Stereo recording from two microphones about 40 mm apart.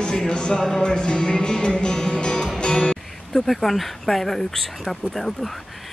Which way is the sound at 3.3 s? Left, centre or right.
Centre.